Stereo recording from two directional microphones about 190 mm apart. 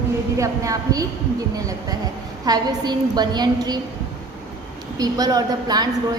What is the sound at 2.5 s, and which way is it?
Speech, 20° right (ahead or behind).